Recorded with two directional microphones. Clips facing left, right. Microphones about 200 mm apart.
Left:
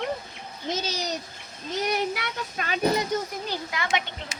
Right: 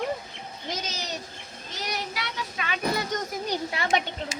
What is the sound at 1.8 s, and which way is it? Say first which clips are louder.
Child singing: left 5 dB; 55° left (ahead or behind).